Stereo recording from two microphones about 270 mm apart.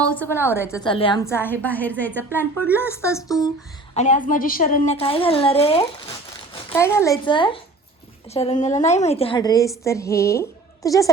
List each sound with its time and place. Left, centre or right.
0.0 s a woman's voice: centre
3.9 s a woman's voice: left
6.5 s a child's voice: centre